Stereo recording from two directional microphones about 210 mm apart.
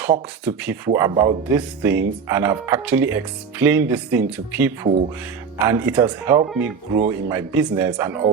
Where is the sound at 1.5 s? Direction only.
10° right (ahead or behind).